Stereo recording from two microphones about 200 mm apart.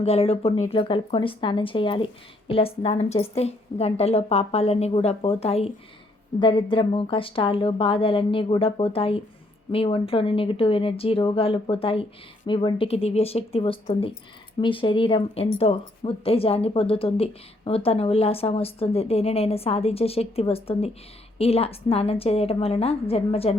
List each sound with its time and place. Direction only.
0.0 s a woman's voice: 30° left (ahead or behind)